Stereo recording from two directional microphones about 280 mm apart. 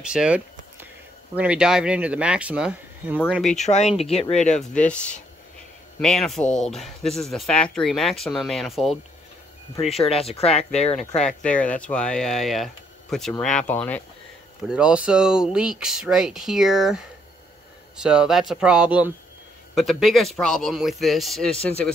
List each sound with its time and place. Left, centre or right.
0.0 s a sound: centre
1.3 s speech: centre
3.6 s speech: left
4.7 s speech: centre
9.8 s speech: left
11.1 s speech: centre
18.0 s speech: centre